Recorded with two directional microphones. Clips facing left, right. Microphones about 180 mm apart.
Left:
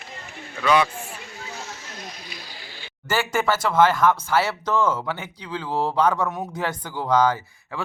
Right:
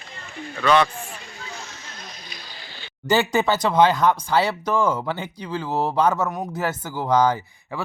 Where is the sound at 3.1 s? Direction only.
20° right (ahead or behind).